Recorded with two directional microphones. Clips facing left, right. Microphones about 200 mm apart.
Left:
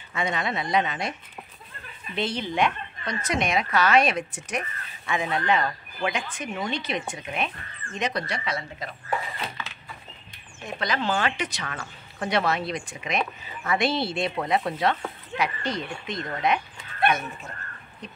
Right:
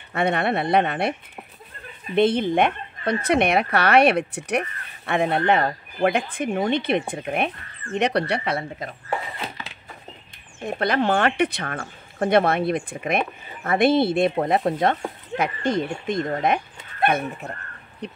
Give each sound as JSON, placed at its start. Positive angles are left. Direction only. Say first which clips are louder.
{"t": 0.1, "sound": "speech", "louder": "right 6 dB", "side_deg": -60}
{"t": 2.1, "sound": "speech", "louder": "right 8 dB", "side_deg": -55}
{"t": 10.6, "sound": "speech", "louder": "right 7 dB", "side_deg": -60}
{"t": 16.3, "sound": "dog", "louder": "right 3 dB", "side_deg": -45}
{"t": 18.0, "sound": "speech", "louder": "right 8 dB", "side_deg": -65}